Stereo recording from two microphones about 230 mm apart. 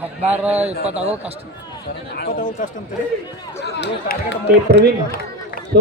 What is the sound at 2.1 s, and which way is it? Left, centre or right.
Speech, left.